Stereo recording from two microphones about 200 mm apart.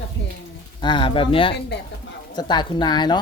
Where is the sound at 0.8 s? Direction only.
25° left (ahead or behind).